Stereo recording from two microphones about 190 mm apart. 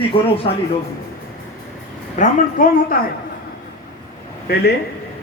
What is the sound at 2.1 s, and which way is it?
Speech, 45° left (ahead or behind).